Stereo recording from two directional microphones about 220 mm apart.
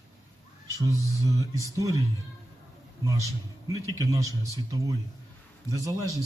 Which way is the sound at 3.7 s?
15° right (ahead or behind).